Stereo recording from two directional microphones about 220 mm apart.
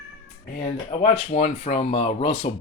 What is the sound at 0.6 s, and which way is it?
Speech, 30° left (ahead or behind).